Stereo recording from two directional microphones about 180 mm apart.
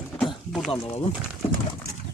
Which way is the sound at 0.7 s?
35° left (ahead or behind).